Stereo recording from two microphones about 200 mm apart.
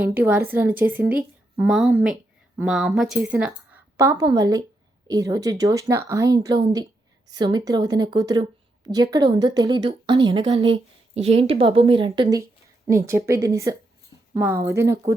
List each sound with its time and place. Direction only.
0.0 s a woman's voice: 10° right (ahead or behind)